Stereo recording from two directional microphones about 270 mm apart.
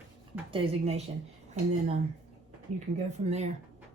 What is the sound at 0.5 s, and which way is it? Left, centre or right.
Speech, right.